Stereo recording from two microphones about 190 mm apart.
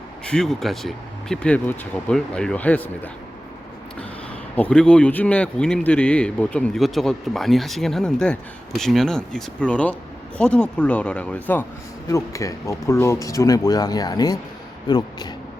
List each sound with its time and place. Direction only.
0.3 s a man's voice: 5° left (ahead or behind)
4.5 s a man's voice: 5° left (ahead or behind)